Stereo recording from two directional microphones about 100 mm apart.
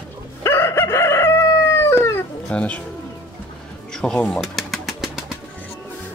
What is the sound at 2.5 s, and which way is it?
Speech, 15° left (ahead or behind).